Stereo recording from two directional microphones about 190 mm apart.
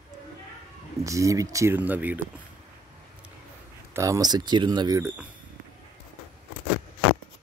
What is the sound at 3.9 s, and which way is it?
Speech, 15° right (ahead or behind).